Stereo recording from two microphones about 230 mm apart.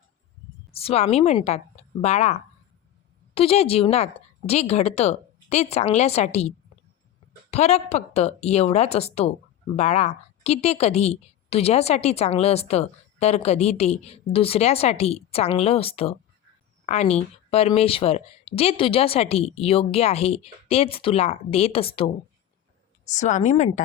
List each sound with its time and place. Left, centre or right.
0.7 s a woman's voice: left
7.5 s a woman's voice: left
23.1 s a woman's voice: left